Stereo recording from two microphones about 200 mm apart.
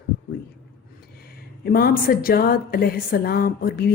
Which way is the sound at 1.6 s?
50° left (ahead or behind).